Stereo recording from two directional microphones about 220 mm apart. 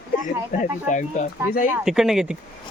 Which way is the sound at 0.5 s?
35° left (ahead or behind).